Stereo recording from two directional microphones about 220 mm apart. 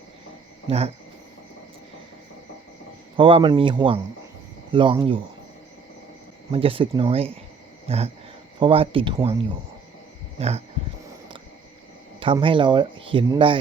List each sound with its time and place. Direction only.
0.7 s speech: 30° right (ahead or behind)
3.2 s speech: 25° right (ahead or behind)
6.5 s speech: 25° right (ahead or behind)
10.3 s a sound: 30° right (ahead or behind)
12.2 s speech: 25° right (ahead or behind)